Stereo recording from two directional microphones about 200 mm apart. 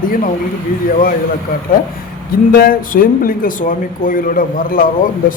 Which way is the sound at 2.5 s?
45° left (ahead or behind).